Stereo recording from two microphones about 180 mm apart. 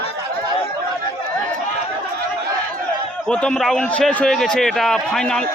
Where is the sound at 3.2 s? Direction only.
5° left (ahead or behind).